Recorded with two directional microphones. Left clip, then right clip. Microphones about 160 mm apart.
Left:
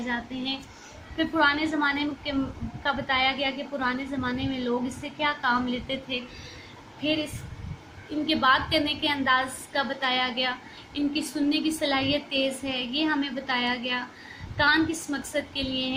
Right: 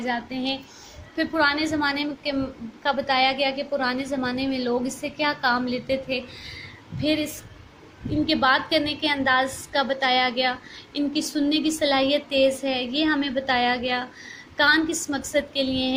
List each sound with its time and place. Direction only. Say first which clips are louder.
0.1 s a woman's voice: right 3 dB; 40° right (ahead or behind)
8.3 s a woman's voice: right 1 dB; 40° right (ahead or behind)